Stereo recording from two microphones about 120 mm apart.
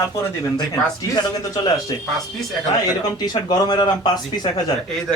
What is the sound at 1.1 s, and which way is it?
Speech, 30° left (ahead or behind).